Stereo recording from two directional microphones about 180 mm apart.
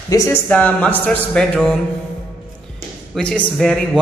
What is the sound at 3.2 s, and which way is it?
Speech, 5° left (ahead or behind).